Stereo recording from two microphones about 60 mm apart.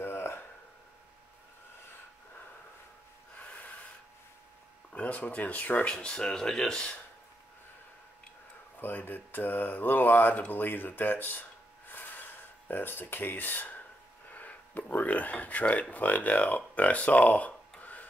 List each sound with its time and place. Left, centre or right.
0.0 s a sound: left
3.3 s snort: left
4.9 s speech: left
8.7 s speech: left
11.9 s a sound: left
14.3 s speech: left